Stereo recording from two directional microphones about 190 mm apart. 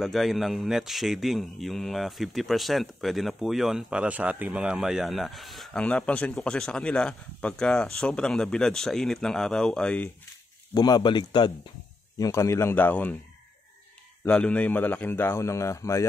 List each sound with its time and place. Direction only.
0.0 s speech: centre (ahead or behind)
10.7 s a man's voice: 20° left (ahead or behind)
14.2 s a man's voice: 5° left (ahead or behind)